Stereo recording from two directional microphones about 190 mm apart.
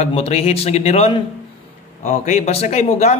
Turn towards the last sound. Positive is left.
turn(degrees=35)  # may be behind; listen again after turning